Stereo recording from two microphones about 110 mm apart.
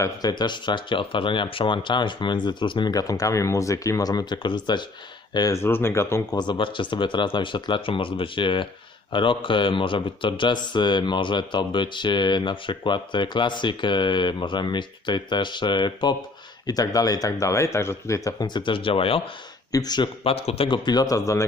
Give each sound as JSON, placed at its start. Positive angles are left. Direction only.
{"t": 0.0, "sound": "speech", "side_deg": 35}
{"t": 5.5, "sound": "speech", "side_deg": 20}
{"t": 6.3, "sound": "speech", "side_deg": 40}
{"t": 19.7, "sound": "speech", "side_deg": 35}
{"t": 20.2, "sound": "speech", "side_deg": 65}
{"t": 20.7, "sound": "speech", "side_deg": 45}